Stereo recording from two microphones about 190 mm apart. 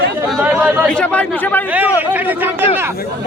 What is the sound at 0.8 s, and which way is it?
Speech, 5° left (ahead or behind).